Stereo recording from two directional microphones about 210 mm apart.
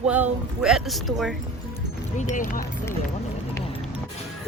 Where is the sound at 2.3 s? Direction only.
40° left (ahead or behind).